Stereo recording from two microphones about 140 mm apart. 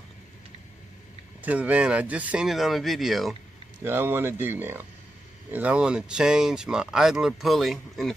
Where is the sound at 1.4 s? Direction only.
10° right (ahead or behind).